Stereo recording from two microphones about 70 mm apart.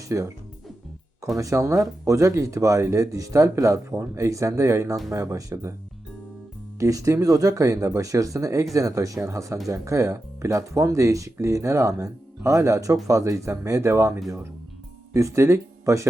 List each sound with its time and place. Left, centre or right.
0.1 s speech: right
1.4 s speech: right
6.7 s speech: right